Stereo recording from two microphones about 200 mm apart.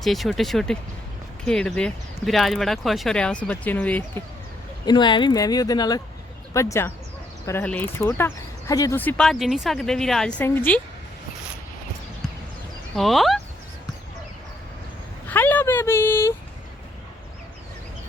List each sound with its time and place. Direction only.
0.0 s speech: centre (ahead or behind)
4.9 s speech: 20° left (ahead or behind)
13.0 s speech: centre (ahead or behind)
15.3 s speech: 10° left (ahead or behind)